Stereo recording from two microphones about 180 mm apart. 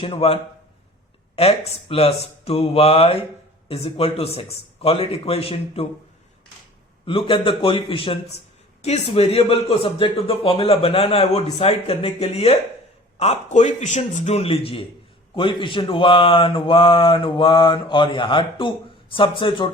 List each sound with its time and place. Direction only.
0.0 s speech: 30° left (ahead or behind)
1.4 s speech: 35° left (ahead or behind)
7.0 s speech: 30° left (ahead or behind)